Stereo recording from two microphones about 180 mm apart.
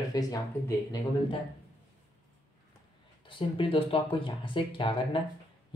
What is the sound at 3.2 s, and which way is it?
Speech, 30° left (ahead or behind).